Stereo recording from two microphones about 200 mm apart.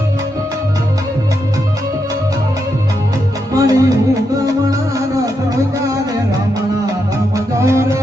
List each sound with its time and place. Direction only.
3.5 s music: 15° right (ahead or behind)
7.3 s music: 15° right (ahead or behind)